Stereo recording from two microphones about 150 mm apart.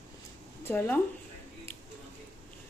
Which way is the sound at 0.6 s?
15° left (ahead or behind).